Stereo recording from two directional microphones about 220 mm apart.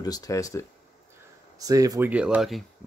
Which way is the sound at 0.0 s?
15° left (ahead or behind).